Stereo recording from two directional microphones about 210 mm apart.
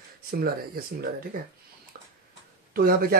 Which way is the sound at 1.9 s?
45° right (ahead or behind).